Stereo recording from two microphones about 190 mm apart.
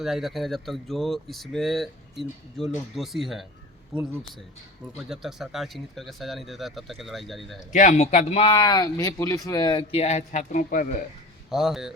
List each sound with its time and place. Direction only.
0.0 s speech: centre (ahead or behind)
5.0 s speech: centre (ahead or behind)
7.7 s speech: 40° left (ahead or behind)
11.5 s speech: centre (ahead or behind)